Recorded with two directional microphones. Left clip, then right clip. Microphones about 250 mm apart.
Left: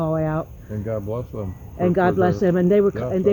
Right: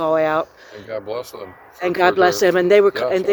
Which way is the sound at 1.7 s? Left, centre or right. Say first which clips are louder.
Right 3 dB; right.